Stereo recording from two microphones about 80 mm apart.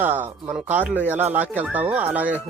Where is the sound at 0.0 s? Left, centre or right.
Right.